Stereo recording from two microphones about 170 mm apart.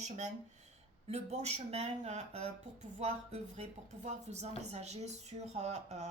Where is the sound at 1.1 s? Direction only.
40° right (ahead or behind).